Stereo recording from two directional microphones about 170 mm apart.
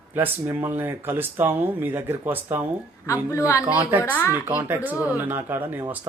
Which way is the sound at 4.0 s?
15° left (ahead or behind).